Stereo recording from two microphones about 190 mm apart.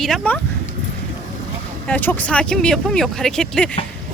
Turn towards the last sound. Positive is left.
turn(degrees=5)  # may be behind; listen again after turning